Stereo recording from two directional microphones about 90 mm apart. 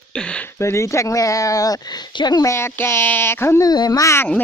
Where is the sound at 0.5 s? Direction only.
30° left (ahead or behind); by 2.4 s 55° left (ahead or behind).